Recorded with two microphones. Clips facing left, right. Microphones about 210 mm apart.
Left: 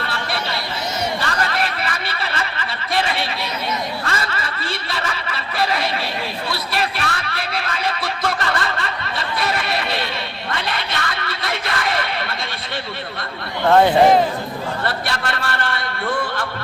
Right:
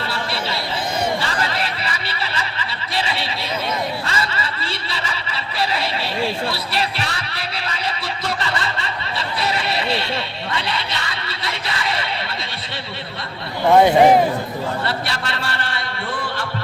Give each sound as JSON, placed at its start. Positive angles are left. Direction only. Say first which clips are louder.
{"t": 1.2, "sound": "snicker", "louder": "left 1 dB", "side_deg": 55}
{"t": 6.5, "sound": "a sound", "louder": "even", "side_deg": 50}
{"t": 13.7, "sound": "speech", "louder": "right 1 dB", "side_deg": -15}
{"t": 14.8, "sound": "a man's voice", "louder": "left 1 dB", "side_deg": 50}